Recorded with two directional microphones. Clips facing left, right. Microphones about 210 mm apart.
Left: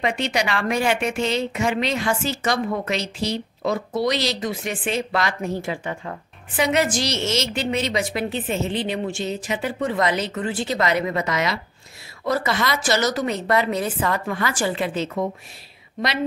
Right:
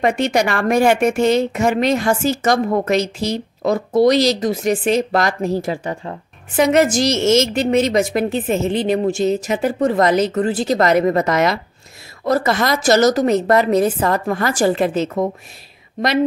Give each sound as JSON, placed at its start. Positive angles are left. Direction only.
{"t": 0.0, "sound": "a woman's voice", "side_deg": -45}